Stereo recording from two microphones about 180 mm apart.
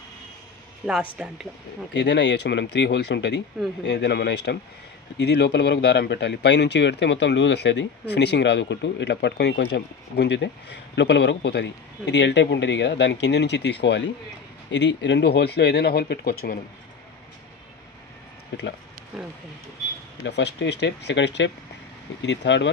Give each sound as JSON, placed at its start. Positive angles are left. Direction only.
{"t": 1.1, "sound": "speech", "side_deg": -5}
{"t": 2.0, "sound": "a man's voice", "side_deg": 75}
{"t": 18.5, "sound": "a man's voice", "side_deg": 75}
{"t": 19.1, "sound": "speech", "side_deg": 0}
{"t": 20.2, "sound": "a man's voice", "side_deg": 75}